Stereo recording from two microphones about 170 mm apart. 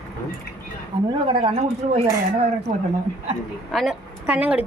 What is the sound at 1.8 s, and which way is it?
Speech, 50° right (ahead or behind).